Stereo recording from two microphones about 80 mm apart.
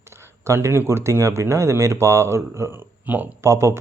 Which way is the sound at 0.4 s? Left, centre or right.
Right.